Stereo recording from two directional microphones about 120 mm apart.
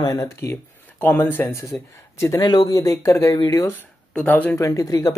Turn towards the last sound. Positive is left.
turn(degrees=30)  # may be behind; listen again after turning